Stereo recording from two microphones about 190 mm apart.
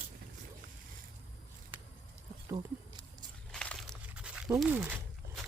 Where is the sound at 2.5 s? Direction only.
20° right (ahead or behind).